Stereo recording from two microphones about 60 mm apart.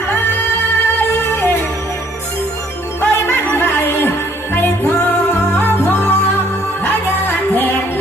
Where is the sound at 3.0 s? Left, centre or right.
Left.